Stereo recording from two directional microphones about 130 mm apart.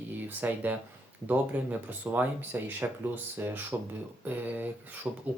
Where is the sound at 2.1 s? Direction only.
15° right (ahead or behind).